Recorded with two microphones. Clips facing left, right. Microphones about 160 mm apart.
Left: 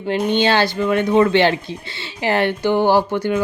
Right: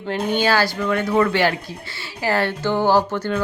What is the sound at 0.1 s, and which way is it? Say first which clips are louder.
Speech: left 3 dB; 20° left (ahead or behind).